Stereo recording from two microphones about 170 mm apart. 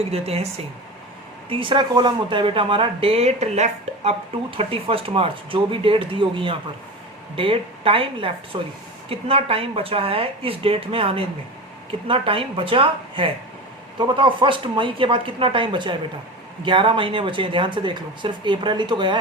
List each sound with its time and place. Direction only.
0.0 s speech: 35° right (ahead or behind)
1.5 s speech: 30° right (ahead or behind)